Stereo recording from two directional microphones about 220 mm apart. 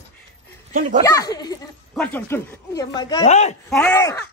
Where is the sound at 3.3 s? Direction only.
30° left (ahead or behind).